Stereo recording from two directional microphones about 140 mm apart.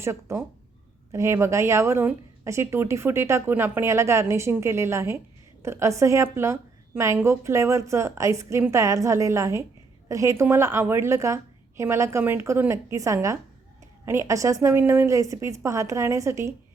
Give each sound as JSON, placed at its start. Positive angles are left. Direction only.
{"t": 0.0, "sound": "speech", "side_deg": -20}